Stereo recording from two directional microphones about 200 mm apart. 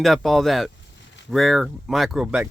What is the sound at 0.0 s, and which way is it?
Speech, centre (ahead or behind).